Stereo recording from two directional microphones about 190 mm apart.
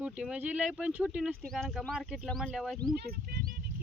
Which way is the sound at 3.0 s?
50° right (ahead or behind).